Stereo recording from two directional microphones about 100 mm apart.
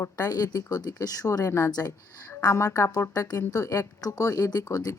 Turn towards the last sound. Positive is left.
turn(degrees=35)  # may be behind; listen again after turning